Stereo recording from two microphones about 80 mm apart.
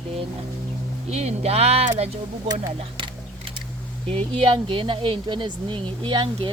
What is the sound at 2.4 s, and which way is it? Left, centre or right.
Speech, right.